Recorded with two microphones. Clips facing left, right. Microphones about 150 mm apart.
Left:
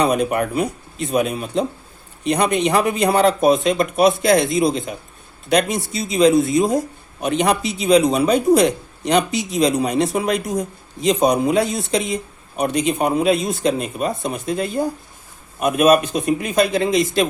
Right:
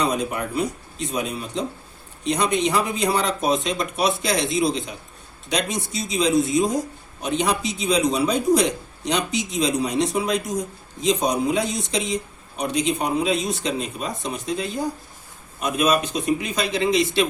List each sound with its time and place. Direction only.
0.0 s a man's voice: 60° left (ahead or behind); by 17.2 s 45° left (ahead or behind)